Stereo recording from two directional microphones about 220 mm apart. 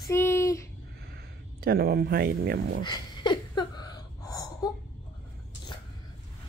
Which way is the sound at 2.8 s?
20° left (ahead or behind).